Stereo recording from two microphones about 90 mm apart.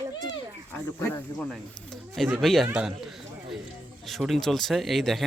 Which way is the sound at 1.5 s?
5° left (ahead or behind).